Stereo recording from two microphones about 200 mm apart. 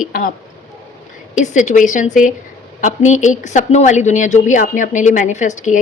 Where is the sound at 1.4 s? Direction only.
40° left (ahead or behind).